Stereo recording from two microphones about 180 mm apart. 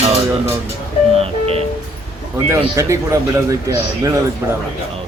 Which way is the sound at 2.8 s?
15° right (ahead or behind).